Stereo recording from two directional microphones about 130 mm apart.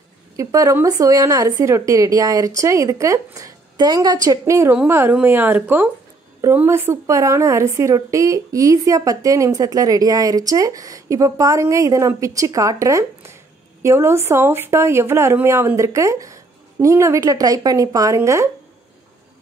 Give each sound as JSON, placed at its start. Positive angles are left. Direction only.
{"t": 0.4, "sound": "a woman's voice", "side_deg": -25}